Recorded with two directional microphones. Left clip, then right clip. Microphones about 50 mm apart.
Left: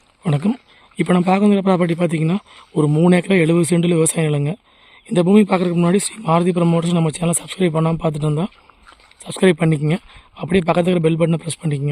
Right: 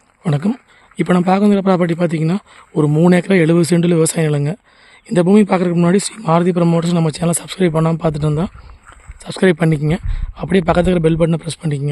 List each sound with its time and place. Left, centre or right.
0.2 s a man's voice: centre
7.1 s a man's voice: centre
8.0 s speech: centre
8.4 s a sound: centre
9.3 s a man's voice: centre
10.3 s a man's voice: centre